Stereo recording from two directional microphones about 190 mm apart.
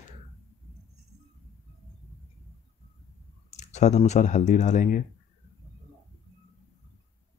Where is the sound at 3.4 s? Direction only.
40° left (ahead or behind).